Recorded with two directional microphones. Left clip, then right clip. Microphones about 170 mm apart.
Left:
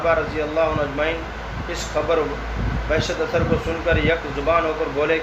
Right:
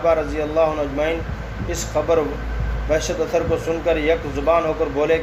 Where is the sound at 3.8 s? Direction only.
50° right (ahead or behind).